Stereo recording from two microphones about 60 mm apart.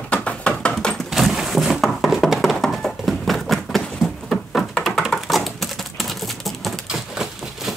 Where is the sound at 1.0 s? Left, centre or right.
Centre.